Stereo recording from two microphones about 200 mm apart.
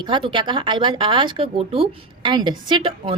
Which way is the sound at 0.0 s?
25° right (ahead or behind).